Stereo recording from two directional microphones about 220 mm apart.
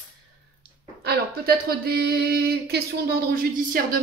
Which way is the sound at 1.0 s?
45° right (ahead or behind).